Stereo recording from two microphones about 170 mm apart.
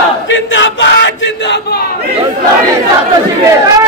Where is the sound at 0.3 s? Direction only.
90° left.